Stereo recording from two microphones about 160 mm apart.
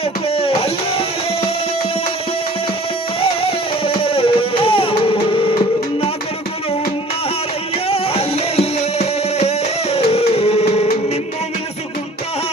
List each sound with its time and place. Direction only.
0.3 s music: 35° left (ahead or behind)
3.2 s music: 35° left (ahead or behind)
7.9 s music: 40° left (ahead or behind)